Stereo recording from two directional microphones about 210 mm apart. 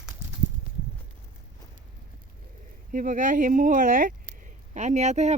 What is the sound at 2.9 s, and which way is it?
Speech, 40° right (ahead or behind).